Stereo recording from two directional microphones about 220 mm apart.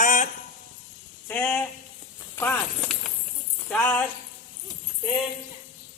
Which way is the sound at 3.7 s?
5° left (ahead or behind).